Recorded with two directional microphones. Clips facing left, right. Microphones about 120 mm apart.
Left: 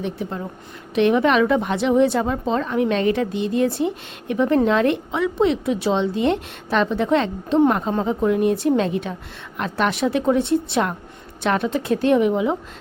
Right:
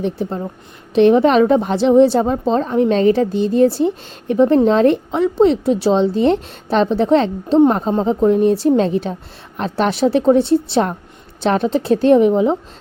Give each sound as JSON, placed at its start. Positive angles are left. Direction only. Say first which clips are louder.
{"t": 0.0, "sound": "a woman's voice", "louder": "right 6 dB", "side_deg": -30}